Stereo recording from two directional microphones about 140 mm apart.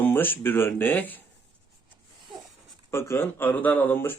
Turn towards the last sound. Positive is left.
turn(degrees=15)  # may be behind; listen again after turning